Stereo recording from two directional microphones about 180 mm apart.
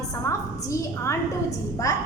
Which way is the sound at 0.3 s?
15° left (ahead or behind).